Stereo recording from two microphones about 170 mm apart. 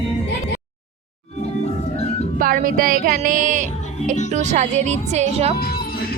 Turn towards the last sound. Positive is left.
turn(degrees=-40)  # may be behind; listen again after turning